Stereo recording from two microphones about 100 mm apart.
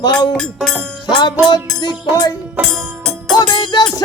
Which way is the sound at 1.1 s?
50° left (ahead or behind).